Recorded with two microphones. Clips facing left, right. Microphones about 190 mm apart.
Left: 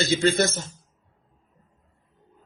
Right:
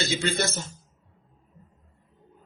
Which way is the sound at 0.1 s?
45° left (ahead or behind).